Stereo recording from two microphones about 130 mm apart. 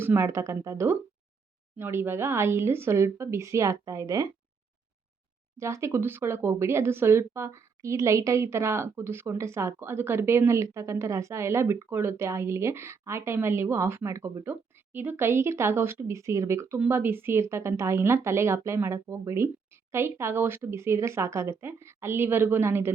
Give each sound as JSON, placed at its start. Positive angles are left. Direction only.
{"t": 0.0, "sound": "speech", "side_deg": -20}
{"t": 5.5, "sound": "speech", "side_deg": -20}